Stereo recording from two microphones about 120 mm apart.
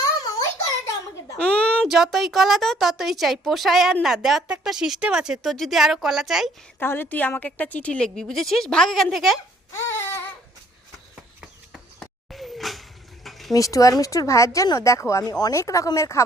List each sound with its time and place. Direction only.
1.4 s a sound: 10° left (ahead or behind)
1.9 s speech: centre (ahead or behind)
6.7 s a woman's voice: 20° left (ahead or behind); by 9.4 s centre (ahead or behind)
9.7 s baby cry: 20° left (ahead or behind)
11.3 s a sound: centre (ahead or behind)
13.5 s speech: 30° left (ahead or behind)